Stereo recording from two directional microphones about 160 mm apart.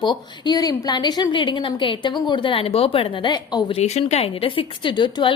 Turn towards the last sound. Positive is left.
turn(degrees=30)  # may be behind; listen again after turning